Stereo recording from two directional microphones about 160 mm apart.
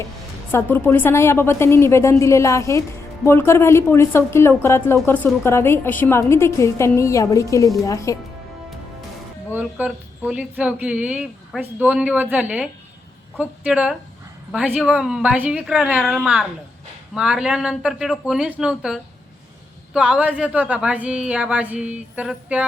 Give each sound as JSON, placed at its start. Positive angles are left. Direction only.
{"t": 0.5, "sound": "a woman's voice", "side_deg": 15}
{"t": 9.5, "sound": "speech", "side_deg": -10}